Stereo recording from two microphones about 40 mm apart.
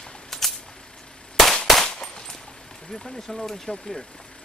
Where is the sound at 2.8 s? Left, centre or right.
Centre.